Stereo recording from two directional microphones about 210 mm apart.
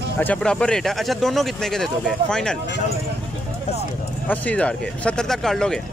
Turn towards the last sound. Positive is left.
turn(degrees=0)  # may be behind; listen again after turning